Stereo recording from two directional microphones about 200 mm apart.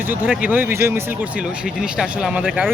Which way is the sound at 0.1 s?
10° right (ahead or behind).